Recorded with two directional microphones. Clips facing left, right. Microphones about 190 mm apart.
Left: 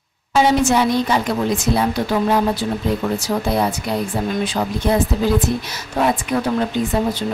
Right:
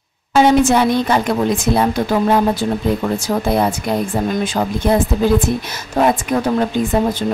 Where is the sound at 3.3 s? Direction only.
40° right (ahead or behind).